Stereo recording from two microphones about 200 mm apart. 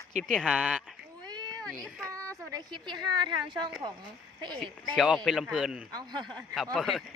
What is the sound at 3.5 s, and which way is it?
Speech, 20° right (ahead or behind).